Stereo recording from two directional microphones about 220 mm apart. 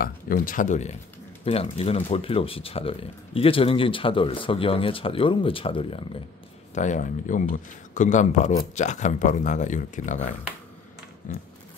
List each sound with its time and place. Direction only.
0.0 s speech: 40° left (ahead or behind)